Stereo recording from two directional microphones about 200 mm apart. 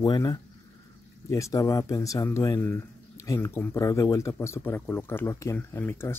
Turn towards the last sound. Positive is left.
turn(degrees=10)  # may be behind; listen again after turning